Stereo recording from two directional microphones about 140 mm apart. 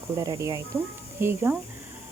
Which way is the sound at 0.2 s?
25° right (ahead or behind).